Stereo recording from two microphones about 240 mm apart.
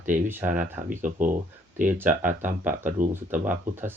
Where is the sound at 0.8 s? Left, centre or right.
Right.